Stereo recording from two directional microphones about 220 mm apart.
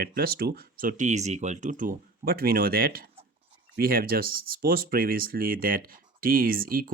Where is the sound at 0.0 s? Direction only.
45° right (ahead or behind).